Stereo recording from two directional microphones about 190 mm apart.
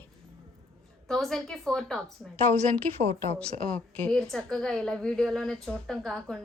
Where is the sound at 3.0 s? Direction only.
35° right (ahead or behind).